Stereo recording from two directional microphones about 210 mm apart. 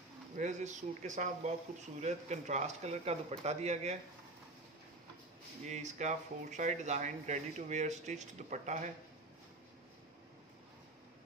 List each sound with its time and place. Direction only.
0.4 s speech: 35° right (ahead or behind)
5.7 s speech: 35° right (ahead or behind)